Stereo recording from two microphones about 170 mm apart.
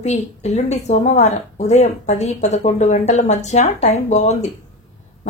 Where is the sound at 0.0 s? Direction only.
40° left (ahead or behind).